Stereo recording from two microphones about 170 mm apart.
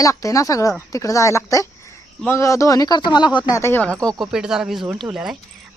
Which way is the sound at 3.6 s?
10° left (ahead or behind).